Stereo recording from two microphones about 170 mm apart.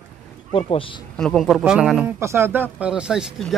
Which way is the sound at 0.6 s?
30° left (ahead or behind).